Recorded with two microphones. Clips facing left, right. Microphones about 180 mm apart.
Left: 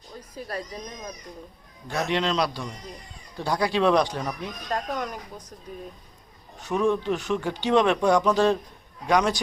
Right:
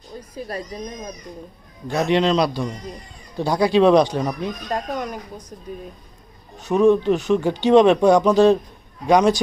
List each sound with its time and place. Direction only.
0.3 s speech: 15° right (ahead or behind)
1.9 s speech: 20° right (ahead or behind)
6.6 s speech: 25° right (ahead or behind)